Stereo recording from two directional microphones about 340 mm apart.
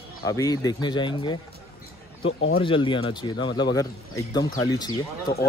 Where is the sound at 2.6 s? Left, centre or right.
Centre.